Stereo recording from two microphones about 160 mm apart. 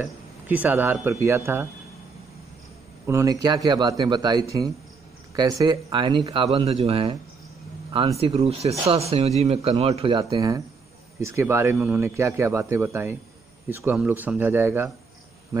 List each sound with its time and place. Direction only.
0.0 s speech: 10° right (ahead or behind)
3.1 s speech: 20° right (ahead or behind); by 10.2 s 35° right (ahead or behind)
10.3 s speech: 20° right (ahead or behind)